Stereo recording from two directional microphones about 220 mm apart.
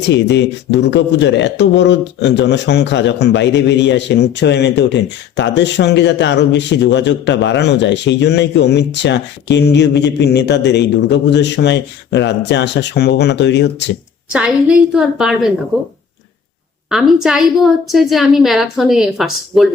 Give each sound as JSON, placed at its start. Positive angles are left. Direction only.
{"t": 0.1, "sound": "speech", "side_deg": 55}
{"t": 14.3, "sound": "a woman's voice", "side_deg": -5}
{"t": 16.9, "sound": "a woman's voice", "side_deg": 0}